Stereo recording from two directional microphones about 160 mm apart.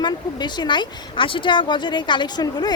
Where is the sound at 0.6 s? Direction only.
30° left (ahead or behind).